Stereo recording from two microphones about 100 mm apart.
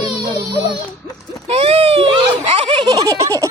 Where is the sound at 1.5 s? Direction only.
85° right; by 2.9 s 55° right (ahead or behind).